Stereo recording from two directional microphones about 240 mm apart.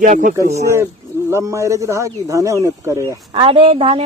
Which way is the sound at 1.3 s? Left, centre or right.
Centre.